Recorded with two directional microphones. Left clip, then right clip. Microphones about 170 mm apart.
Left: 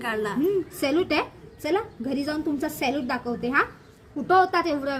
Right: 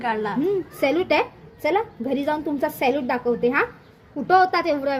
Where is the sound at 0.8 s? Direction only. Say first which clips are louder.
Right 8 dB; 25° left (ahead or behind).